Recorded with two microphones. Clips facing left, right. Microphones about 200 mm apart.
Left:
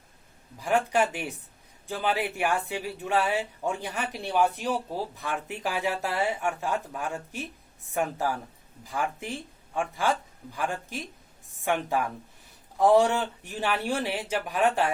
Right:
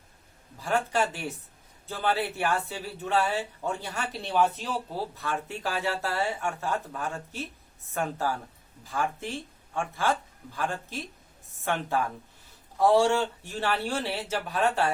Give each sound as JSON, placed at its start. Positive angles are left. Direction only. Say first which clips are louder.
{"t": 0.6, "sound": "speech", "louder": "left 2 dB", "side_deg": 15}